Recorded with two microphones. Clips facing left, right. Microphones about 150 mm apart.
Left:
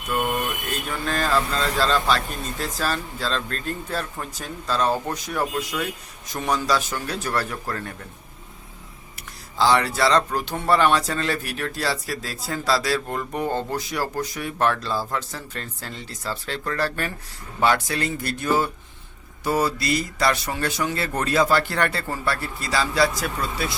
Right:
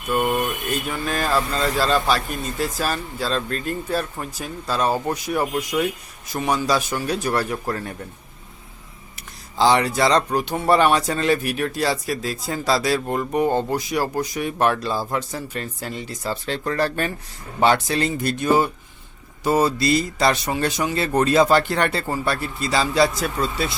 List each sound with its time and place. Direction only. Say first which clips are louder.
0.1 s a man's voice: right 3 dB; 10° right (ahead or behind)
9.6 s a man's voice: right 2 dB; 20° right (ahead or behind)